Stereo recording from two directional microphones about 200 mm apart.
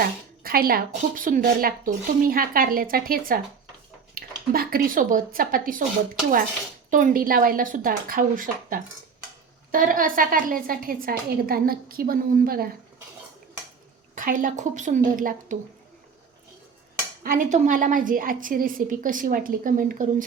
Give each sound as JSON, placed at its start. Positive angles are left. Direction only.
{"t": 0.4, "sound": "a woman's voice", "side_deg": -50}
{"t": 6.9, "sound": "a woman's voice", "side_deg": -45}
{"t": 14.2, "sound": "a woman's voice", "side_deg": -45}
{"t": 17.2, "sound": "a woman's voice", "side_deg": -40}